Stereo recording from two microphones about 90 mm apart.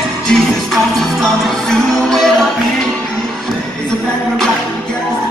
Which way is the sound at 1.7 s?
5° left (ahead or behind).